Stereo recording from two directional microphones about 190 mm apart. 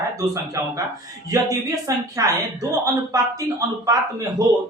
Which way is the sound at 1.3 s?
20° right (ahead or behind).